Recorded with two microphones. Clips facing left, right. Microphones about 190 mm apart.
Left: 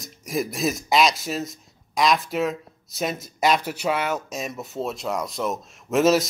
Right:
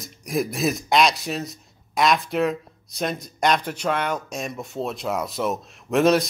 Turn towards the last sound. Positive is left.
turn(degrees=0)  # may be behind; listen again after turning